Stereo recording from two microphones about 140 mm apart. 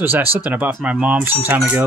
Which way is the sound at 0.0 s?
15° right (ahead or behind).